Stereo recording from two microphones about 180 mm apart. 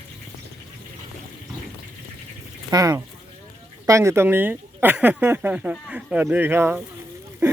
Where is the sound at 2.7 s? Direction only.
20° right (ahead or behind).